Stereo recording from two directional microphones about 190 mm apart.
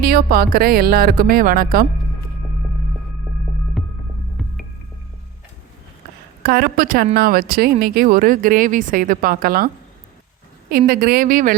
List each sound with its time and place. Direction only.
0.0 s speech: 50° right (ahead or behind)
3.8 s hum: centre (ahead or behind)
4.4 s music: centre (ahead or behind)
6.4 s speech: 55° right (ahead or behind)
10.7 s speech: 50° right (ahead or behind)